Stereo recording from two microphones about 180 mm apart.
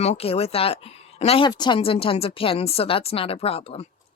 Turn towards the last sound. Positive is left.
turn(degrees=35)  # may be behind; listen again after turning